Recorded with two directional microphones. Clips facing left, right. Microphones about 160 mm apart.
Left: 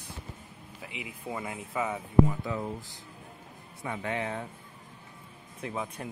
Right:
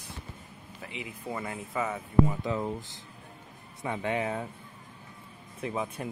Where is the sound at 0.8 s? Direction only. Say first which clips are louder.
Right 1 dB; 10° left (ahead or behind).